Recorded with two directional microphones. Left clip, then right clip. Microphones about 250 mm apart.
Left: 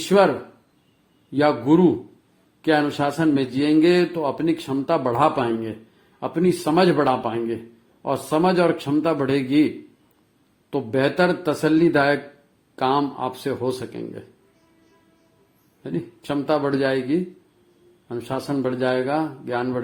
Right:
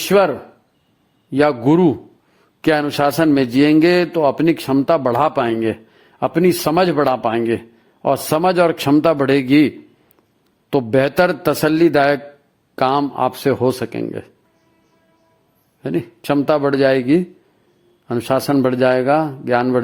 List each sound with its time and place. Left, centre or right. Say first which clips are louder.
0.0 s speech: right 3 dB; right
1.3 s a man's voice: right 4 dB; right
15.8 s a man's voice: right 8 dB; right